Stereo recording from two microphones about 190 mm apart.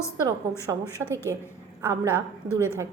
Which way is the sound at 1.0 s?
10° left (ahead or behind).